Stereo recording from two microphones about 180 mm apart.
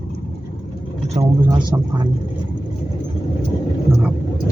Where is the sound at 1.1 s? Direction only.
25° right (ahead or behind).